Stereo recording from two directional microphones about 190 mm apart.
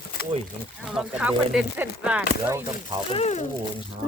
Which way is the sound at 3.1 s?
35° left (ahead or behind).